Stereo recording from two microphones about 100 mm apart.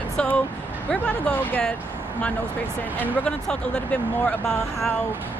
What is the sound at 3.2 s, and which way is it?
Speech, 10° left (ahead or behind).